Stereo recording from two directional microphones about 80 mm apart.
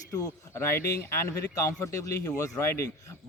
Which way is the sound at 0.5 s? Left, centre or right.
Left.